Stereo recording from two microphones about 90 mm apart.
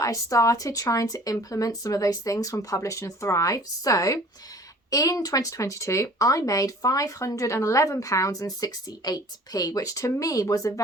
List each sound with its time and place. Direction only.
0.0 s speech: 40° left (ahead or behind)